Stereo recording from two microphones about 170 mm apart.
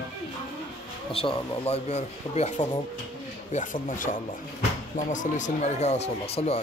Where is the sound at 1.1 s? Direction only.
35° left (ahead or behind).